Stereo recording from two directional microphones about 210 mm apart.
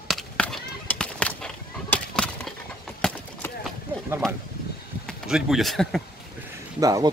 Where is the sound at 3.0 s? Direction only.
5° left (ahead or behind).